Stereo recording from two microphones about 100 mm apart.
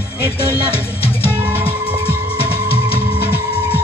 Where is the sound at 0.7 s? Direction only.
70° left (ahead or behind).